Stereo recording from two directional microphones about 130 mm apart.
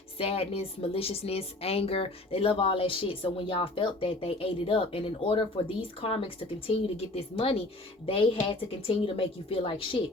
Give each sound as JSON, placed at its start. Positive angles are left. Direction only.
{"t": 0.2, "sound": "a woman's voice", "side_deg": 50}